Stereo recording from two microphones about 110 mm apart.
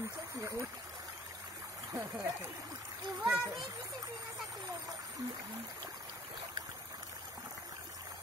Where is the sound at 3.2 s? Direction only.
5° right (ahead or behind).